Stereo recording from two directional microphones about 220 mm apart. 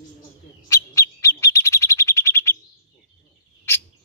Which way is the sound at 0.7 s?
15° left (ahead or behind).